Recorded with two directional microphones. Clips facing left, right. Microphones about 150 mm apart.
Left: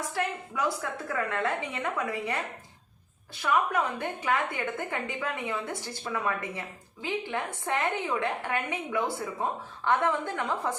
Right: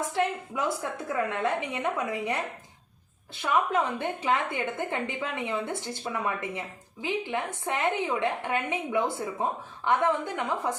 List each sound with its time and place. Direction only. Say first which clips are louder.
0.1 s a woman's voice: right 4 dB; 20° right (ahead or behind)
3.4 s a woman's voice: right 1 dB; 25° right (ahead or behind)